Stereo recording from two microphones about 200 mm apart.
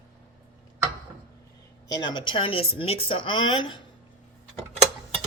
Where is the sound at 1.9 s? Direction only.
20° left (ahead or behind).